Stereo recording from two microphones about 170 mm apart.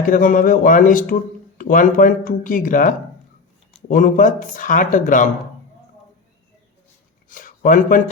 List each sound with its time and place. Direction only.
0.0 s speech: 50° left (ahead or behind)
7.3 s speech: 55° left (ahead or behind)